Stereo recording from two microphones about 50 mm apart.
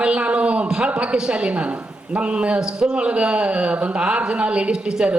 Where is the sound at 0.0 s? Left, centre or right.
Right.